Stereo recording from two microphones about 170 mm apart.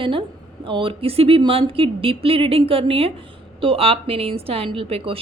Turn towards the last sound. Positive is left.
turn(degrees=-35)  # may be behind; listen again after turning